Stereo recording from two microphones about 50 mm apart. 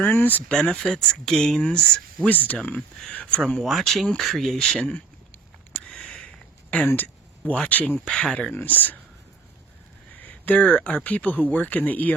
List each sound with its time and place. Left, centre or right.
0.0 s speech: left
0.4 s speech: centre
2.3 s speech: left
3.1 s speech: left
3.6 s speech: centre
5.7 s a sound: centre
6.8 s a sound: left
7.7 s speech: left
8.1 s speech: centre
8.5 s speech: left
10.4 s speech: left